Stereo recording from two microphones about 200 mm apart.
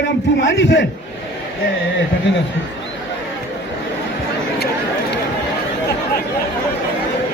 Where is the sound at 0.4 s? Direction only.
65° left (ahead or behind).